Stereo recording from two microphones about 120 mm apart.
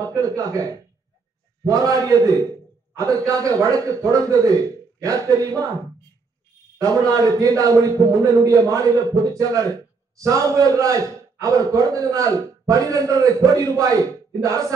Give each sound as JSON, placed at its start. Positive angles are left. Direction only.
{"t": 0.0, "sound": "a man's voice", "side_deg": -30}
{"t": 6.8, "sound": "a man's voice", "side_deg": -30}